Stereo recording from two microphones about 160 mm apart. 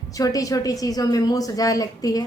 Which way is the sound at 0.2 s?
20° left (ahead or behind).